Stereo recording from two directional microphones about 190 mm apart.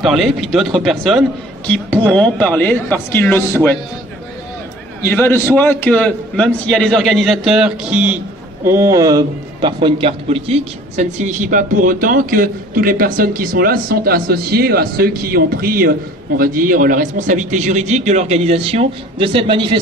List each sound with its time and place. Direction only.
0.0 s a man's voice: centre (ahead or behind)
5.0 s a man's voice: 10° left (ahead or behind); by 19.8 s 25° right (ahead or behind)